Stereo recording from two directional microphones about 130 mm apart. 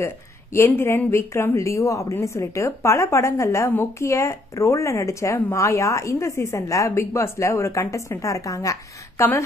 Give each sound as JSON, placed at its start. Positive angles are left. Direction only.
{"t": 0.0, "sound": "speech", "side_deg": 20}